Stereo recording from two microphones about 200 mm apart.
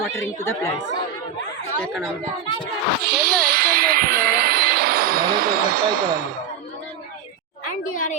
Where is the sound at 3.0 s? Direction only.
50° right (ahead or behind).